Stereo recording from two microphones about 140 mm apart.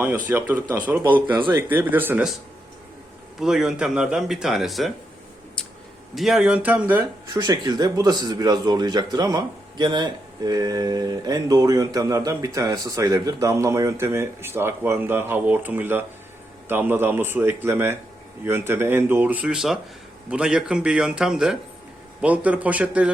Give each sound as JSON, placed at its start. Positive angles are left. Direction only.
{"t": 0.3, "sound": "speech", "side_deg": -15}
{"t": 3.4, "sound": "speech", "side_deg": -5}
{"t": 5.6, "sound": "a sound", "side_deg": 5}
{"t": 6.1, "sound": "speech", "side_deg": 0}
{"t": 7.3, "sound": "speech", "side_deg": -30}